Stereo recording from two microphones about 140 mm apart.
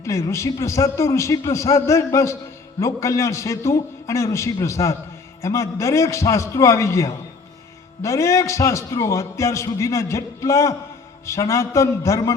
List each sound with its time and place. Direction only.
0.0 s a man's voice: 20° left (ahead or behind)